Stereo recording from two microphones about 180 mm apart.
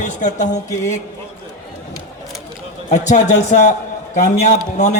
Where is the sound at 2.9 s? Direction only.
40° left (ahead or behind).